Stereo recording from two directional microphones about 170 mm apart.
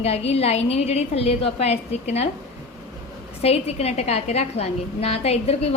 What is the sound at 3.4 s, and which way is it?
A woman's voice, 35° left (ahead or behind).